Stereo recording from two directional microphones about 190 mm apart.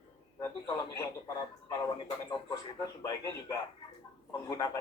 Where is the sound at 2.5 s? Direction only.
20° left (ahead or behind).